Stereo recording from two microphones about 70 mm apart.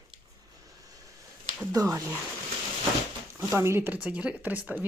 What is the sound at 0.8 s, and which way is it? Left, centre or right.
Vehicle, right.